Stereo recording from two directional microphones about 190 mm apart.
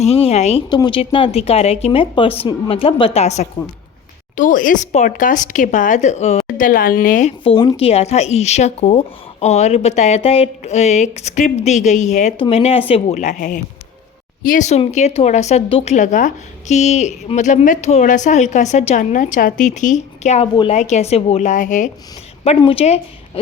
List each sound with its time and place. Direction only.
0.0 s speech: 35° left (ahead or behind)
7.4 s speech: 25° left (ahead or behind); by 21.8 s 45° left (ahead or behind)
22.4 s a woman's voice: 30° left (ahead or behind)